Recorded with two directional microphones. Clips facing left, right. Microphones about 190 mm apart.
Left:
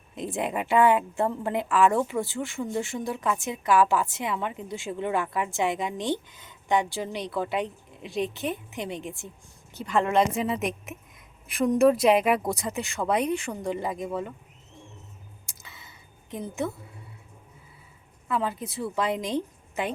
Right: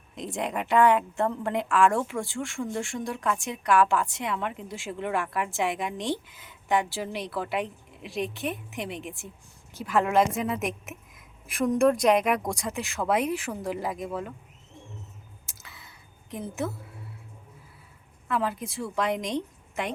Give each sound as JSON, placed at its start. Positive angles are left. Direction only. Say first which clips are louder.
{"t": 0.2, "sound": "a woman's voice", "louder": "left 2 dB", "side_deg": 5}
{"t": 15.4, "sound": "a sound", "louder": "left 1 dB", "side_deg": 0}
{"t": 18.3, "sound": "a woman's voice", "louder": "even", "side_deg": 0}